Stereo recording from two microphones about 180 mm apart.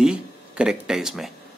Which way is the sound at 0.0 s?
5° right (ahead or behind).